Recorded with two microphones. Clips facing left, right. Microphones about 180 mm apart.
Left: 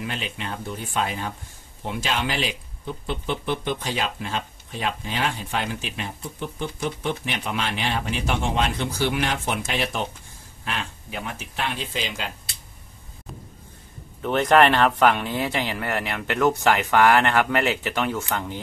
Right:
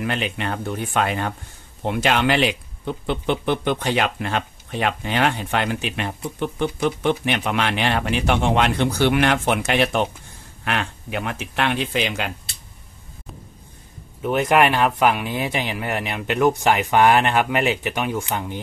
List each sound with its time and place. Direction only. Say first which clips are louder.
0.0 s speech: right 6 dB; 65° right (ahead or behind)
14.2 s speech: even; 10° right (ahead or behind)